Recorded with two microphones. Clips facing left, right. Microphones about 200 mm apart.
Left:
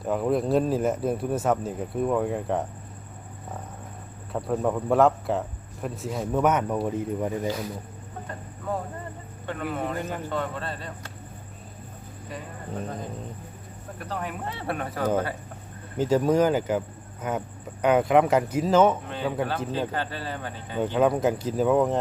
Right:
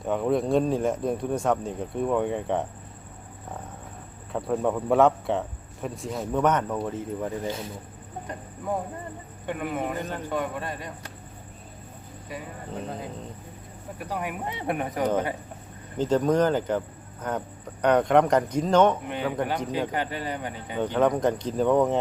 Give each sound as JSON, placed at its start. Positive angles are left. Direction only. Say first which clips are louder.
{"t": 0.0, "sound": "a man's voice", "louder": "even", "side_deg": 0}
{"t": 4.3, "sound": "a man's voice", "louder": "even", "side_deg": 0}
{"t": 8.3, "sound": "speech", "louder": "right 1 dB", "side_deg": -15}
{"t": 14.0, "sound": "speech", "louder": "right 1 dB", "side_deg": -10}
{"t": 16.0, "sound": "a man's voice", "louder": "left 1 dB", "side_deg": 10}
{"t": 19.0, "sound": "speech", "louder": "even", "side_deg": -15}
{"t": 20.7, "sound": "speech", "louder": "left 1 dB", "side_deg": 5}